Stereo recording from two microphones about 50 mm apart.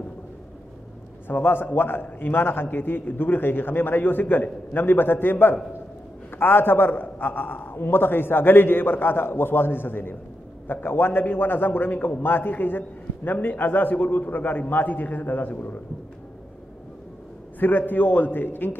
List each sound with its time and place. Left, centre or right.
1.2 s a man's voice: left
17.6 s a man's voice: left